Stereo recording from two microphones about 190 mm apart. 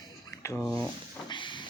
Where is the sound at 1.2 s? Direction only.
25° left (ahead or behind).